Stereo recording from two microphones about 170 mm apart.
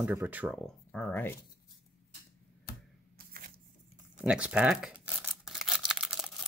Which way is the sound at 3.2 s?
60° right (ahead or behind).